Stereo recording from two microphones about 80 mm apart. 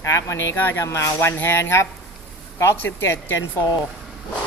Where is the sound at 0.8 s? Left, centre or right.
Left.